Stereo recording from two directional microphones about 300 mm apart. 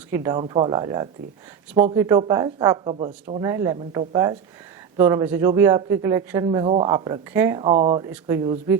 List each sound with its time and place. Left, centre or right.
0.1 s a man's voice: centre